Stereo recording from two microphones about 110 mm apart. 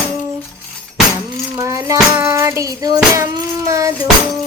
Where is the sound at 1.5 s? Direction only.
25° right (ahead or behind).